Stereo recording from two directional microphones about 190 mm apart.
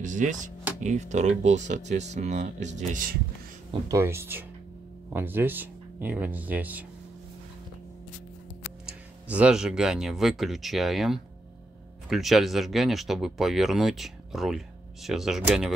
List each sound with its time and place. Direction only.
0.0 s speech: 40° right (ahead or behind)
3.9 s speech: 15° right (ahead or behind)
8.8 s speech: 5° right (ahead or behind)